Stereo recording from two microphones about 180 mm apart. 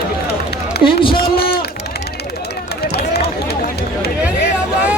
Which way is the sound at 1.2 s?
60° left (ahead or behind).